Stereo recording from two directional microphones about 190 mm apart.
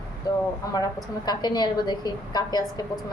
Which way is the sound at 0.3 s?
20° left (ahead or behind).